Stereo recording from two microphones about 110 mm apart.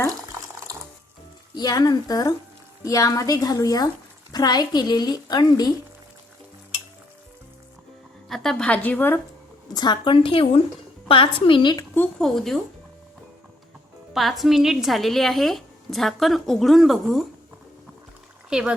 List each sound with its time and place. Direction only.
1.5 s speech: 35° left (ahead or behind)
8.3 s a woman's voice: 5° left (ahead or behind)
9.7 s a woman's voice: 45° left (ahead or behind)
12.2 s a woman's voice: centre (ahead or behind)
14.1 s a woman's voice: centre (ahead or behind)
18.5 s a woman's voice: 5° right (ahead or behind)